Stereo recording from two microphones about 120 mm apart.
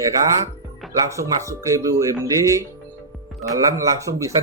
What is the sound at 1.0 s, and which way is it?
A man's voice, 25° right (ahead or behind).